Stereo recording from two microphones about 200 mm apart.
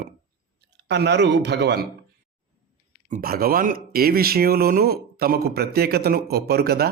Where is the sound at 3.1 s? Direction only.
50° right (ahead or behind).